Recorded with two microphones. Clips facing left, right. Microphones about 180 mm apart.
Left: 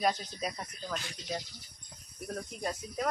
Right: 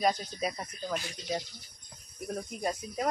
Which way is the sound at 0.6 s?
15° right (ahead or behind).